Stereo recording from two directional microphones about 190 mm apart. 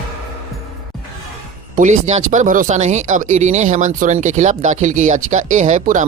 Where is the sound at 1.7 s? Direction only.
40° right (ahead or behind).